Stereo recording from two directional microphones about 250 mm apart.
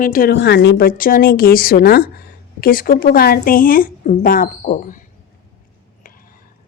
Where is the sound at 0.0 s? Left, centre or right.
Left.